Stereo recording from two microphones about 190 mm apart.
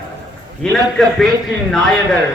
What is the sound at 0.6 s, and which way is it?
Speech, 5° left (ahead or behind).